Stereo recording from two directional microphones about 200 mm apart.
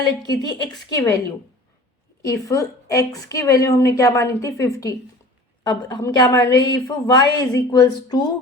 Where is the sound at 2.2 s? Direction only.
15° left (ahead or behind).